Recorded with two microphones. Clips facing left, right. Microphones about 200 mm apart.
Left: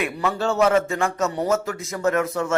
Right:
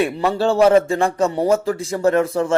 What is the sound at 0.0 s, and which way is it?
A man's voice, 30° right (ahead or behind).